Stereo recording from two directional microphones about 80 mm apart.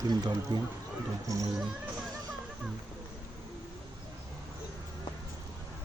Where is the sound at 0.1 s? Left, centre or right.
Right.